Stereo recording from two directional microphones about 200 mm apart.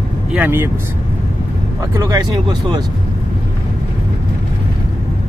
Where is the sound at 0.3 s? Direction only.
10° right (ahead or behind).